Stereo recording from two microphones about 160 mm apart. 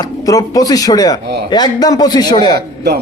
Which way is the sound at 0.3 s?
20° left (ahead or behind).